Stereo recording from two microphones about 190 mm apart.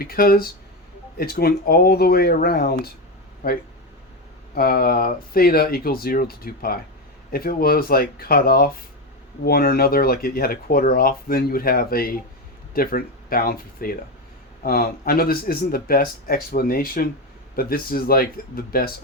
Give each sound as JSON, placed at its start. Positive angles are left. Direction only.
{"t": 0.0, "sound": "speech", "side_deg": 50}
{"t": 4.5, "sound": "speech", "side_deg": 50}